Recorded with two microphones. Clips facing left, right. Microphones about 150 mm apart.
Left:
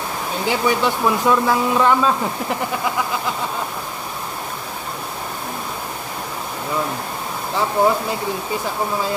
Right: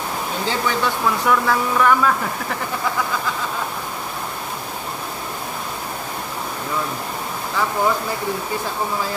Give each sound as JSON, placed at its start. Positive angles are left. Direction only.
{"t": 0.5, "sound": "speech", "side_deg": 15}